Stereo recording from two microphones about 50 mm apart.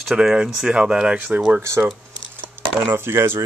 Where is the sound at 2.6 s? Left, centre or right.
Right.